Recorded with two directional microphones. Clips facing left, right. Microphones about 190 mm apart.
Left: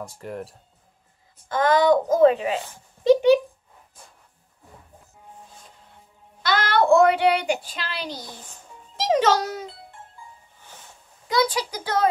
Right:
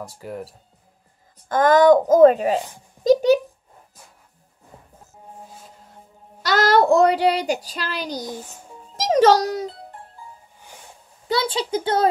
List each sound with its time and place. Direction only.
0.0 s speech: centre (ahead or behind)
1.5 s speech: 45° right (ahead or behind)
3.0 s a sound: 40° right (ahead or behind)
6.4 s a child's voice: 40° right (ahead or behind)
11.2 s a child's voice: 30° right (ahead or behind)